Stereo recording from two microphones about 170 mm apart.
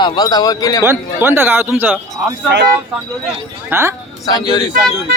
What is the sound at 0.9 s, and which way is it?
Speech, 15° right (ahead or behind).